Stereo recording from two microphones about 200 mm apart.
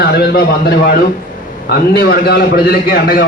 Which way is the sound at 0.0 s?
50° left (ahead or behind).